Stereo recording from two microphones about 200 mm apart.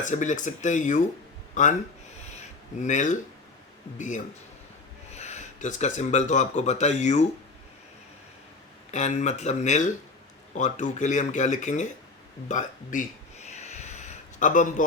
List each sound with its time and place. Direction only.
0.0 s speech: 40° left (ahead or behind)
2.8 s speech: 40° left (ahead or behind)
8.9 s speech: 35° left (ahead or behind)
12.5 s a sound: 40° left (ahead or behind)